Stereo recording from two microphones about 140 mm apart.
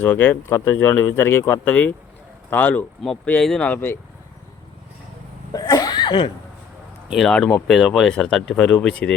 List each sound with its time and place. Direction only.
0.0 s speech: 15° left (ahead or behind)
5.5 s a sound: 25° left (ahead or behind)
7.1 s speech: 5° left (ahead or behind)